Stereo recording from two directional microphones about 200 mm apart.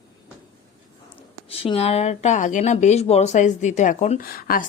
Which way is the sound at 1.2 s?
30° left (ahead or behind).